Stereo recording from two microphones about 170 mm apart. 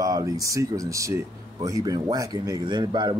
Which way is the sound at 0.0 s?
20° right (ahead or behind).